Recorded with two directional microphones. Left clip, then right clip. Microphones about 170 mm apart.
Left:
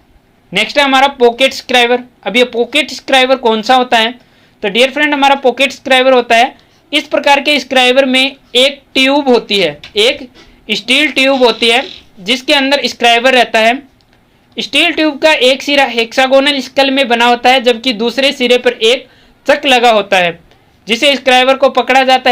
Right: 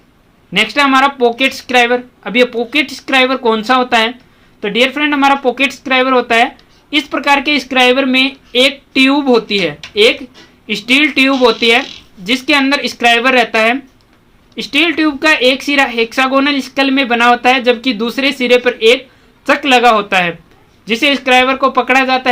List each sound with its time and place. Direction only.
0.5 s speech: 20° left (ahead or behind)